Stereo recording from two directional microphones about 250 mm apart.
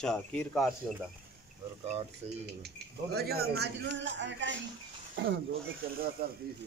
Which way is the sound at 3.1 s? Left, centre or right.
Right.